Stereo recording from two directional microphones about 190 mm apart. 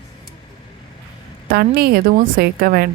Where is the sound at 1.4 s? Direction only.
55° right (ahead or behind).